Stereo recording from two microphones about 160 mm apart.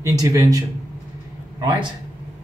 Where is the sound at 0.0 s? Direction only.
20° right (ahead or behind).